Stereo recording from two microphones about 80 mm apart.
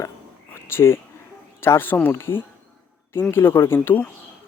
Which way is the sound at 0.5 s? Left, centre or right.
Left.